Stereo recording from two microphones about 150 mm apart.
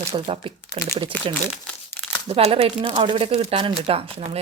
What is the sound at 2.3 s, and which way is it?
Speech, 40° right (ahead or behind).